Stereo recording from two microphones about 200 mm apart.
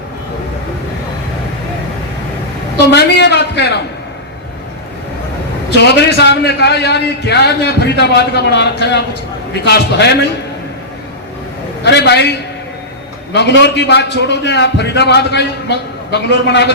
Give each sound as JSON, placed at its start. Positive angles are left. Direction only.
{"t": 2.9, "sound": "a man's voice", "side_deg": 55}
{"t": 5.7, "sound": "a man's voice", "side_deg": 55}
{"t": 11.8, "sound": "a man's voice", "side_deg": 60}
{"t": 13.3, "sound": "a man's voice", "side_deg": 60}